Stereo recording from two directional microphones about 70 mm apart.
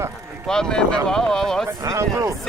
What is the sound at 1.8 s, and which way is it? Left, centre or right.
Speech, right.